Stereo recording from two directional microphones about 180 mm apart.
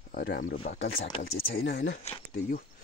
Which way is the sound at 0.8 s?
75° left (ahead or behind).